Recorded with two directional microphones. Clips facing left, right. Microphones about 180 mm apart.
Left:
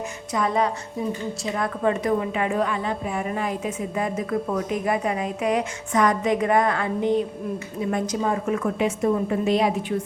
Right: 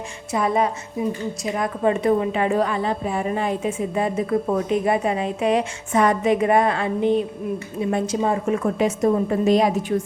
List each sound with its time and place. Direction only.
0.3 s a woman's voice: 20° right (ahead or behind); by 9.8 s 40° right (ahead or behind)